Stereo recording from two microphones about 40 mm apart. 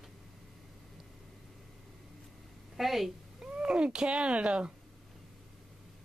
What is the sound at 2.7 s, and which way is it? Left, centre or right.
Speech, centre.